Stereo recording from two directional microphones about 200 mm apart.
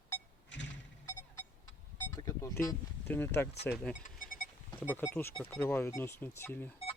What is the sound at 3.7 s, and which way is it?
Speech, 5° left (ahead or behind).